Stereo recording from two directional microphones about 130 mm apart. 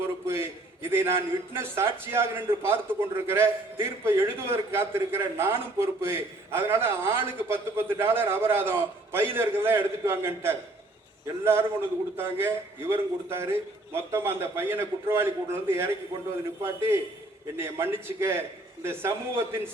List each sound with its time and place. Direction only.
0.0 s a man's voice: 20° right (ahead or behind)